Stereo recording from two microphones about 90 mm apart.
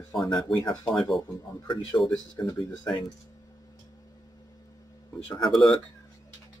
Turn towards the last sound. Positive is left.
turn(degrees=5)  # may be behind; listen again after turning